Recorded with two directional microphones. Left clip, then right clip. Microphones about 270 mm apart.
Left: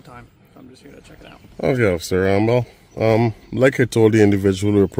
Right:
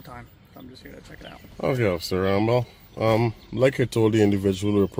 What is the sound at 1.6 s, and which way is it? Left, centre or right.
Speech, left.